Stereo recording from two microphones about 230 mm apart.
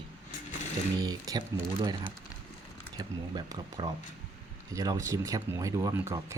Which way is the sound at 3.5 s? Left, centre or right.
Centre.